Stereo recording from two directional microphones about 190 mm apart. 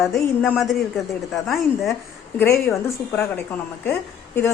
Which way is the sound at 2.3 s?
15° left (ahead or behind).